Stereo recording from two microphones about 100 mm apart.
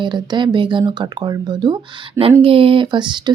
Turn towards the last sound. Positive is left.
turn(degrees=-50)  # may be behind; listen again after turning